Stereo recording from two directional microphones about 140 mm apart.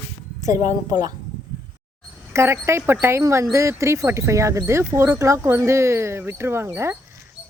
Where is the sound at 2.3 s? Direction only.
20° right (ahead or behind).